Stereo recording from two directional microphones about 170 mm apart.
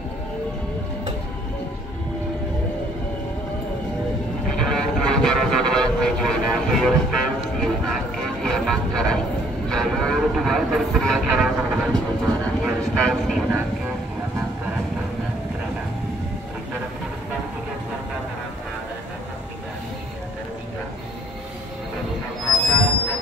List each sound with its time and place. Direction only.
4.5 s vehicle: 5° left (ahead or behind)